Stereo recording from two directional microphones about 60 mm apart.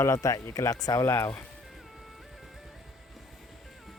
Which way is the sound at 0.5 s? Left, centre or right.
Left.